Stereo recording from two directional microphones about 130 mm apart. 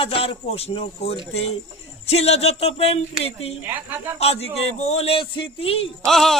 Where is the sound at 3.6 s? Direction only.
15° right (ahead or behind).